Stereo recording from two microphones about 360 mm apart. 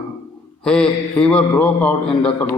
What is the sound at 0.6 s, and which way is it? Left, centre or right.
A man's voice, centre.